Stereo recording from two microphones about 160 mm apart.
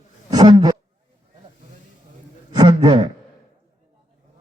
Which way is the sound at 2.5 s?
25° right (ahead or behind).